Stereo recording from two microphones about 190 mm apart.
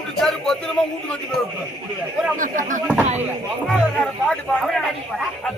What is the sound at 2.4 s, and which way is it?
Speech, 40° right (ahead or behind).